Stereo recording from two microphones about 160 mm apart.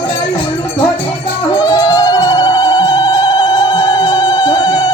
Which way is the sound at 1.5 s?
20° left (ahead or behind).